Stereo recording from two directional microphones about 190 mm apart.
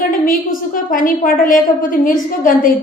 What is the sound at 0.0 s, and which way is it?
A woman's voice, 45° left (ahead or behind).